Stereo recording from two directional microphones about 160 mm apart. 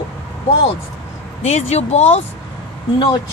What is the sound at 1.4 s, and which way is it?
Speech, 45° left (ahead or behind).